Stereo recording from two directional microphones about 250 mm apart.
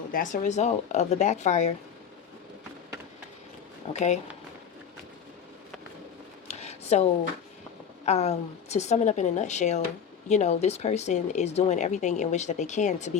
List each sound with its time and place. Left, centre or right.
0.1 s speech: left
3.9 s speech: left
6.5 s a sound: left
8.0 s speech: left